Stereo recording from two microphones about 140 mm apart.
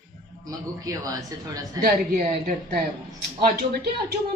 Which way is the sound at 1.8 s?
85° right.